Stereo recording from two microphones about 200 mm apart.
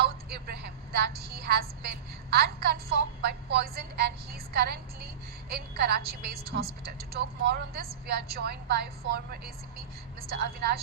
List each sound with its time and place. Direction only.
0.0 s a woman's voice: 55° right (ahead or behind)